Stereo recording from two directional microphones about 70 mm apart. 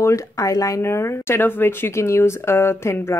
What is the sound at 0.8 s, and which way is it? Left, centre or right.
Speech, left.